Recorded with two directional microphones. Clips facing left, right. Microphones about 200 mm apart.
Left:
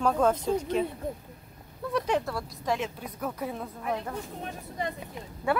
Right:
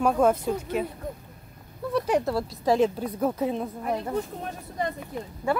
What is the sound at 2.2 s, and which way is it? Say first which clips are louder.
Speech: right 7 dB; 25° right (ahead or behind).